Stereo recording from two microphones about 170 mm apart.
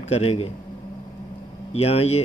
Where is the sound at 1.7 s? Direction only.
35° left (ahead or behind).